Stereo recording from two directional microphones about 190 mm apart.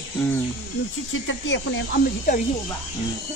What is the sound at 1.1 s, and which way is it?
Speech, 80° left.